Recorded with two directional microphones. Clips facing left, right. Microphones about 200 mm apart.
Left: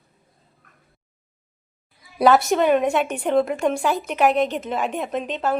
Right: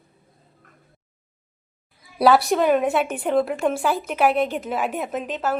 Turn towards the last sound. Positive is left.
turn(degrees=-5)  # may be behind; listen again after turning